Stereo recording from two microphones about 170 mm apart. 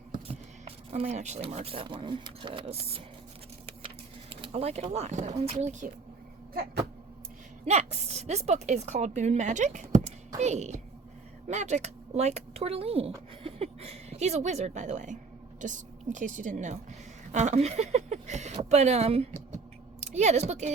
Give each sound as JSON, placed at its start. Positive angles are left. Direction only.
{"t": 1.0, "sound": "a woman's voice", "side_deg": -45}
{"t": 7.6, "sound": "a woman's voice", "side_deg": -40}